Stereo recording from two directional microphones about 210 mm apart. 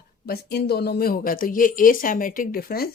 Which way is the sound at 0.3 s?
50° left (ahead or behind).